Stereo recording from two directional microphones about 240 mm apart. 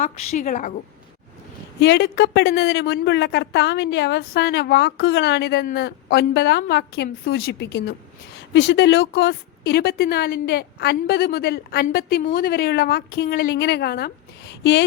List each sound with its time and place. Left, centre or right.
0.0 s a woman's voice: left
1.8 s a woman's voice: left